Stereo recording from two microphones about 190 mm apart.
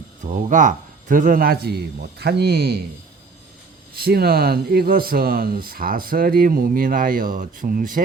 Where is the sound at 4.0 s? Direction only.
55° right (ahead or behind).